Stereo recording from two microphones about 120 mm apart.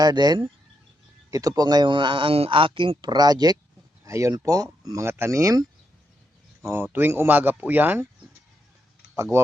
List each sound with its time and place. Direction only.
0.0 s speech: 35° right (ahead or behind); by 8.0 s 15° right (ahead or behind)
9.1 s speech: 25° right (ahead or behind)